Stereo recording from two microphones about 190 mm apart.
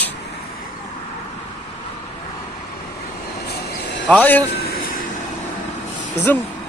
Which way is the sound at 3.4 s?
65° left (ahead or behind).